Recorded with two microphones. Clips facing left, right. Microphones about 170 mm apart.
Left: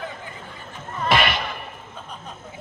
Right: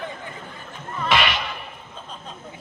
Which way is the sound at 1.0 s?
50° left (ahead or behind).